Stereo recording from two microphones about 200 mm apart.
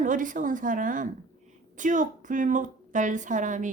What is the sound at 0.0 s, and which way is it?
A woman's voice, 40° right (ahead or behind).